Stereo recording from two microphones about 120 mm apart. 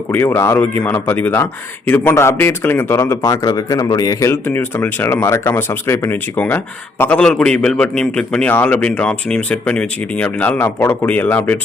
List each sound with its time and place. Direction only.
0.1 s a man's voice: 20° left (ahead or behind)